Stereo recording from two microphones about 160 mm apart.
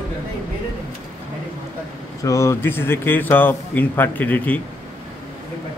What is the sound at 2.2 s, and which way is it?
Speech, 20° left (ahead or behind).